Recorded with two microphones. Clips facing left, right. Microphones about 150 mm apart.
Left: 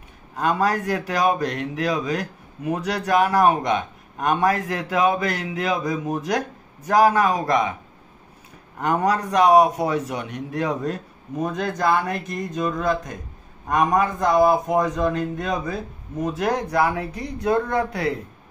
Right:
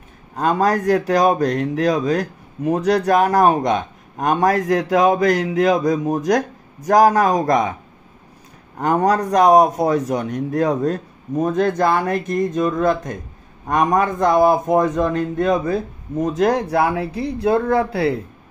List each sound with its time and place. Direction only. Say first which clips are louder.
0.4 s speech: right 4 dB; 40° right (ahead or behind)
8.7 s speech: right 4 dB; 40° right (ahead or behind)
15.5 s speech: right 7 dB; 45° right (ahead or behind); by 18.1 s 30° right (ahead or behind)